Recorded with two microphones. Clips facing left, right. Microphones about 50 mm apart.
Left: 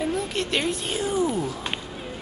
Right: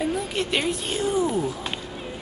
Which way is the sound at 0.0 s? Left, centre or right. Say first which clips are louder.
Right 1 dB; centre.